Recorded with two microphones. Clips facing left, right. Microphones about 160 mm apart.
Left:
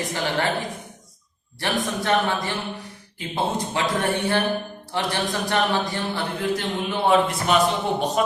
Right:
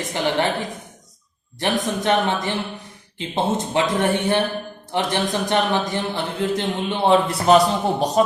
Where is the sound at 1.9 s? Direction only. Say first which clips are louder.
Right 2 dB; 20° right (ahead or behind).